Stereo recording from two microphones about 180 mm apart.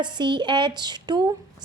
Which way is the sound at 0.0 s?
25° right (ahead or behind).